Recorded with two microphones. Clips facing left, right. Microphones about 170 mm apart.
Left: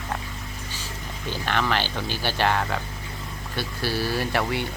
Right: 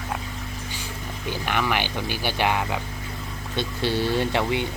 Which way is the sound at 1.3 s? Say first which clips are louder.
Even; 10° right (ahead or behind).